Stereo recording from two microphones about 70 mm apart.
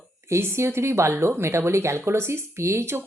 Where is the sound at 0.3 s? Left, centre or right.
Right.